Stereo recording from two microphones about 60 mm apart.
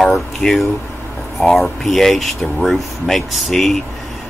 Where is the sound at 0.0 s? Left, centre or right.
Centre.